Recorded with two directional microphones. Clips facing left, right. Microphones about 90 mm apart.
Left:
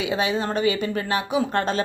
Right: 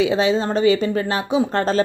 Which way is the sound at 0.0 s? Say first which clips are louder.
Right 6 dB; 30° right (ahead or behind).